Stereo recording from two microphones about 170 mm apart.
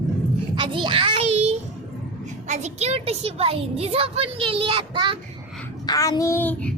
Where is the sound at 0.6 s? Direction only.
30° right (ahead or behind).